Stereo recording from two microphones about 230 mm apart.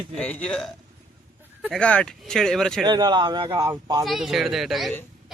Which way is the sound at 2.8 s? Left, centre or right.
Centre.